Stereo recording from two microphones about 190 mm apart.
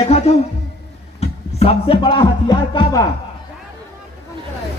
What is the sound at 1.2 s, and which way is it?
Speech, 30° left (ahead or behind).